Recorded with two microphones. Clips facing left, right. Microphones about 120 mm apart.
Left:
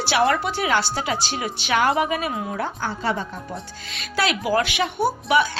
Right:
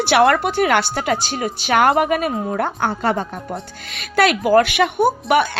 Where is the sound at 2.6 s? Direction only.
55° right (ahead or behind).